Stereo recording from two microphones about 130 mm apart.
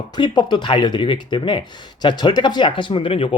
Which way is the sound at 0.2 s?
35° left (ahead or behind).